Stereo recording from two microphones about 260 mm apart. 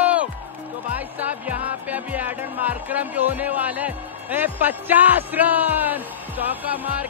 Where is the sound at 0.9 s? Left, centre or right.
Centre.